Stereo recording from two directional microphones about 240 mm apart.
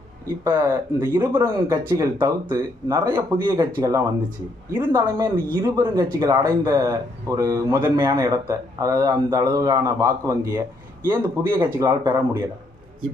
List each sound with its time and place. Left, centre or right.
0.4 s speech: centre